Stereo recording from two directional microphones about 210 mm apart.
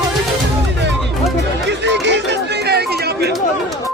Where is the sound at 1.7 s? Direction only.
55° right (ahead or behind).